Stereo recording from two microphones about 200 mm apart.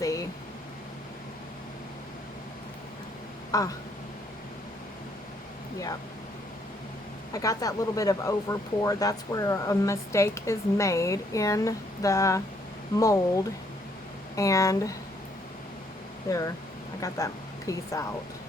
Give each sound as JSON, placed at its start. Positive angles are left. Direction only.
{"t": 0.0, "sound": "air conditioning", "side_deg": 15}
{"t": 3.5, "sound": "speech", "side_deg": 15}
{"t": 7.3, "sound": "speech", "side_deg": 15}
{"t": 17.0, "sound": "speech", "side_deg": 15}